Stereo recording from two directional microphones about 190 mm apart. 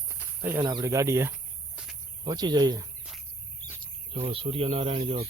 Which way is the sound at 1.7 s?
Centre (ahead or behind).